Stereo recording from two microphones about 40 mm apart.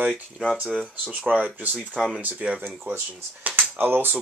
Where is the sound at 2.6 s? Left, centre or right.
Right.